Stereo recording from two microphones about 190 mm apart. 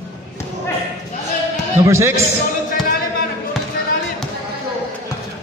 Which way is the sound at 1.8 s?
15° right (ahead or behind).